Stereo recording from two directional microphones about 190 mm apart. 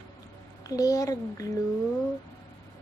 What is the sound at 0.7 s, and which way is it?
Speech, 20° left (ahead or behind).